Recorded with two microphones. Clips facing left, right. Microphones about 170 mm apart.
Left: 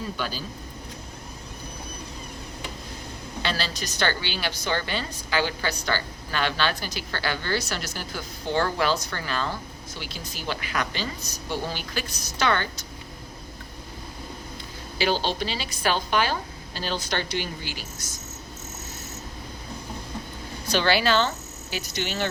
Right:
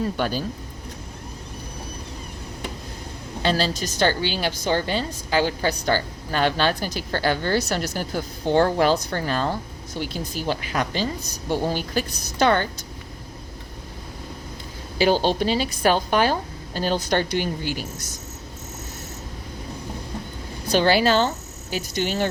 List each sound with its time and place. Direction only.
0.2 s speech: 55° right (ahead or behind)
3.4 s a woman's voice: 45° right (ahead or behind)
14.9 s a woman's voice: 45° right (ahead or behind)
20.7 s speech: 45° right (ahead or behind)